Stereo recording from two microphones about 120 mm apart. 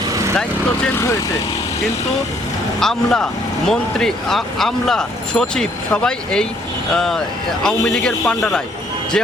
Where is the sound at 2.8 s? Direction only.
5° left (ahead or behind).